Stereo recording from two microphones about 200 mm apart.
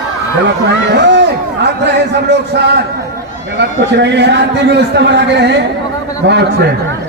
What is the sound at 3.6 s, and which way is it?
A man's voice, 60° right (ahead or behind).